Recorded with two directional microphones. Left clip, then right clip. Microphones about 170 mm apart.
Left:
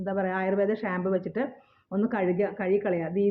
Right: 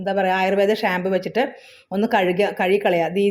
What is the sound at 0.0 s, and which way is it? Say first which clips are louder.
A woman's voice: right 9 dB; 15° right (ahead or behind).